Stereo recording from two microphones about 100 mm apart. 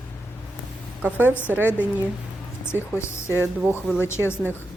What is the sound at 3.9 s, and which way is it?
Speech, 25° left (ahead or behind).